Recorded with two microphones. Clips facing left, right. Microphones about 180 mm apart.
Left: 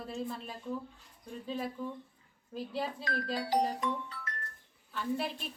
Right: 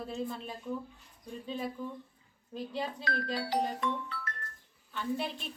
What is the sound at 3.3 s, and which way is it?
Music, 15° left (ahead or behind).